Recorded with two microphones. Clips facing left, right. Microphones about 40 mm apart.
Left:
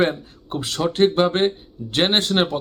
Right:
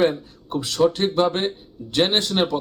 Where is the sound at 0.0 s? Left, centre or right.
Left.